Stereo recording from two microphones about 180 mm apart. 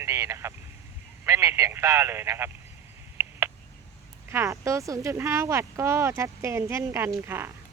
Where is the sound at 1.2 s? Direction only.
15° right (ahead or behind).